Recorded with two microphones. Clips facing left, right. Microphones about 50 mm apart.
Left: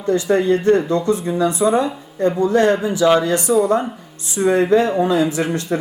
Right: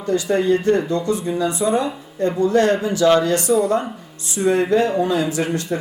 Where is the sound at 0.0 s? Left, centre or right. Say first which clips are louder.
Left 2 dB; left.